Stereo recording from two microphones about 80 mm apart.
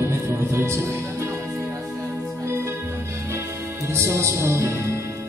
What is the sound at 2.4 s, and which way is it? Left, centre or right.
Music, right.